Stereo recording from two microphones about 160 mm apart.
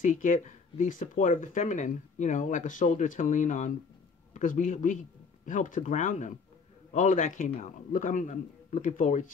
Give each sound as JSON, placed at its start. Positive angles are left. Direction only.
{"t": 0.0, "sound": "speech", "side_deg": 55}